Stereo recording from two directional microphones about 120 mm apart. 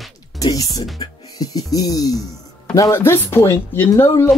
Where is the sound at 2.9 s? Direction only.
20° left (ahead or behind).